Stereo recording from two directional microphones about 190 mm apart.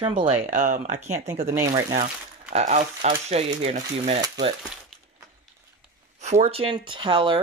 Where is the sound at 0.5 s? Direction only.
40° right (ahead or behind).